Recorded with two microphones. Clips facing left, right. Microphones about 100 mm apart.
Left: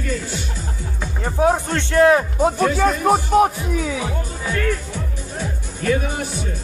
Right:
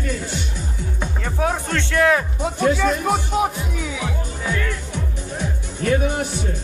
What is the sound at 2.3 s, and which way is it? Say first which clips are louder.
Speech: left 2 dB; 45° left (ahead or behind).